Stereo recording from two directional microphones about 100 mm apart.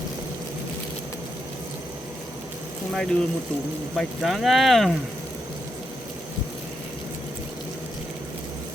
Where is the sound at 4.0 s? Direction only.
Centre (ahead or behind).